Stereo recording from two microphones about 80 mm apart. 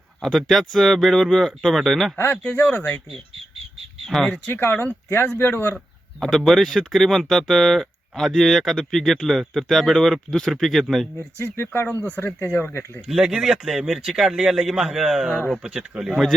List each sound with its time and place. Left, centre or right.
0.2 s speech: centre
2.1 s speech: left
4.0 s speech: centre
4.4 s speech: left
5.7 s speech: centre
11.3 s speech: left
13.1 s speech: centre